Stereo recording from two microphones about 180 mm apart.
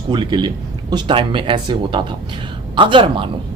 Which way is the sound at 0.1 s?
25° right (ahead or behind).